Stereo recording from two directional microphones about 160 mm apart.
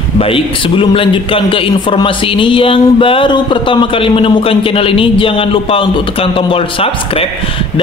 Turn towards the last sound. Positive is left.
turn(degrees=35)  # may be behind; listen again after turning